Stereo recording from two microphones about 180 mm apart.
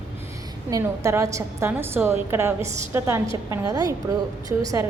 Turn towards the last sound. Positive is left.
turn(degrees=-20)  # may be behind; listen again after turning